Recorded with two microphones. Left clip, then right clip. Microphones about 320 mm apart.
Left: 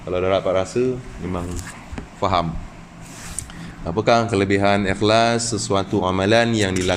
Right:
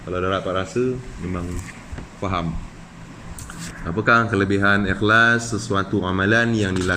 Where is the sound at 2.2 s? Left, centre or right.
Centre.